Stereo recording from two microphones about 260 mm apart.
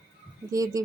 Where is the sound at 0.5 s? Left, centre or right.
Centre.